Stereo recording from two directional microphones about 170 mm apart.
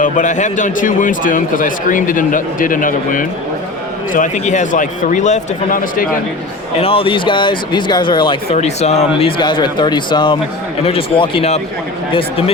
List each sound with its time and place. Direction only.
0.0 s a man's voice: 45° left (ahead or behind)
6.7 s speech: 35° left (ahead or behind)
8.5 s speech: 40° left (ahead or behind)